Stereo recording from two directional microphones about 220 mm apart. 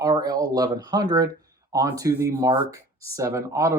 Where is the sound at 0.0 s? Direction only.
15° right (ahead or behind).